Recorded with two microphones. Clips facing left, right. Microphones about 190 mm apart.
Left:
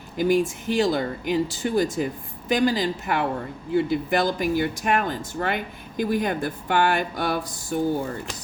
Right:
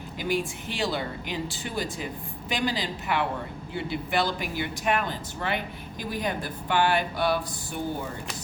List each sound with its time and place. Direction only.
0.2 s speech: 45° left (ahead or behind)